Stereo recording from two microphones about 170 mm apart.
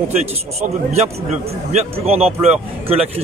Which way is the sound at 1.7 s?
35° right (ahead or behind).